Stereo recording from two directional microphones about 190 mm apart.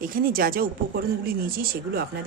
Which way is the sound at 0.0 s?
50° right (ahead or behind).